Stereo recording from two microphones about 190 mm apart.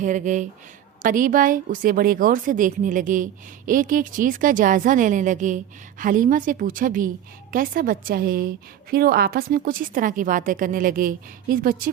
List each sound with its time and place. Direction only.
0.0 s a woman's voice: 40° right (ahead or behind)